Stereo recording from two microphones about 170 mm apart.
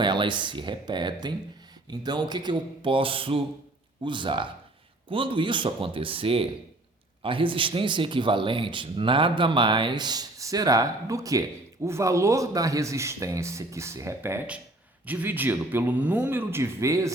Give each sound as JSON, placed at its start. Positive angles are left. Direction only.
{"t": 0.0, "sound": "a man's voice", "side_deg": -25}